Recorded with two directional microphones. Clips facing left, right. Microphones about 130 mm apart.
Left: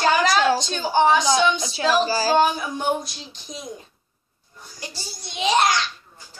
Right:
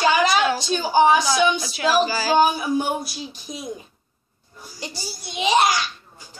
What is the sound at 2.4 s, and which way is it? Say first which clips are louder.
A woman's voice: right 2 dB; 5° right (ahead or behind).